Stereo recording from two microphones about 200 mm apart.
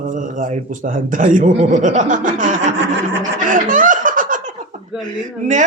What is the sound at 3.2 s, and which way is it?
Snicker, 40° right (ahead or behind).